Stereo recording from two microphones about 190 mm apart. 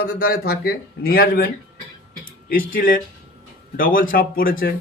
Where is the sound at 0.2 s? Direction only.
55° left (ahead or behind).